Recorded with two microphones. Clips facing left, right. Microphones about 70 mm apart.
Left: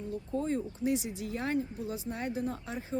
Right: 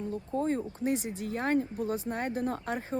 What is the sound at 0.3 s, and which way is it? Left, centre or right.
Speech, right.